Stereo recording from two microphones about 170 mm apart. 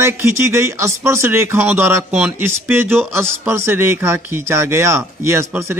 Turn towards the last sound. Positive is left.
turn(degrees=-15)  # may be behind; listen again after turning